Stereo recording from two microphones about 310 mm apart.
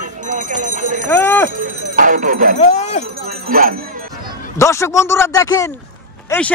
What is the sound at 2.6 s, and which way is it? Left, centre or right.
Speech, left.